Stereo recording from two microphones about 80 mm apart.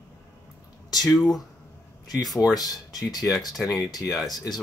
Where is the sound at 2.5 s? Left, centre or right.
Left.